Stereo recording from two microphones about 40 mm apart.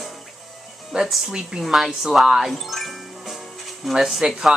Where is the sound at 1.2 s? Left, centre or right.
Centre.